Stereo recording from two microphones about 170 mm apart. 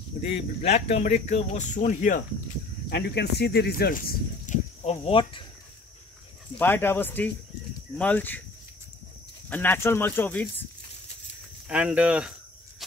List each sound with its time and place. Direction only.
0.2 s speech: 35° left (ahead or behind)
2.9 s speech: 80° left; by 4.6 s 55° left (ahead or behind)
4.8 s speech: 35° left (ahead or behind)
6.6 s speech: 10° left (ahead or behind)
9.5 s speech: 10° left (ahead or behind)
11.7 s speech: 5° right (ahead or behind)